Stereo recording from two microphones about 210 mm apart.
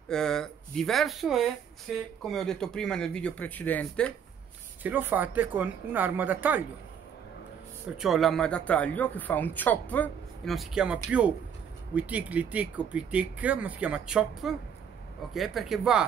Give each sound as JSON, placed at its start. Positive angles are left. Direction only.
{"t": 0.1, "sound": "speech", "side_deg": 5}
{"t": 4.8, "sound": "speech", "side_deg": -10}
{"t": 8.0, "sound": "speech", "side_deg": 0}